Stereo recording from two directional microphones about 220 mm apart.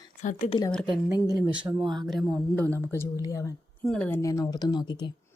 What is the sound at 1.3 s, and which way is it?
Speech, 20° right (ahead or behind).